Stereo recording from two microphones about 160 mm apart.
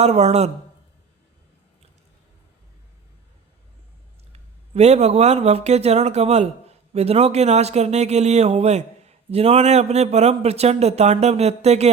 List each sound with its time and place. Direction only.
0.0 s speech: 40° right (ahead or behind)
4.3 s speech: 40° right (ahead or behind)